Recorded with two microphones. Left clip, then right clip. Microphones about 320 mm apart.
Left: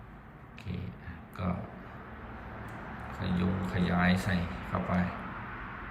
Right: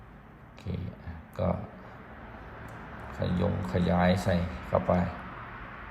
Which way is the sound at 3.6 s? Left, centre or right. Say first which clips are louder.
Right 3 dB; centre.